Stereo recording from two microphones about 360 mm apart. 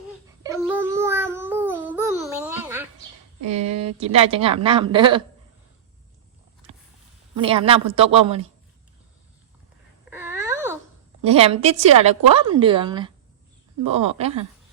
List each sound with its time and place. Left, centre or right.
0.3 s a sound: centre
3.4 s a sound: right
4.0 s a woman's voice: centre
7.3 s a woman's voice: centre
10.1 s wail: centre
11.2 s a woman's voice: centre